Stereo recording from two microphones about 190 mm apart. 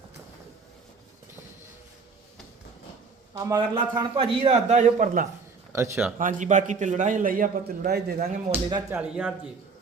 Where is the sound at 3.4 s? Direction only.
15° right (ahead or behind); by 5.2 s 40° right (ahead or behind).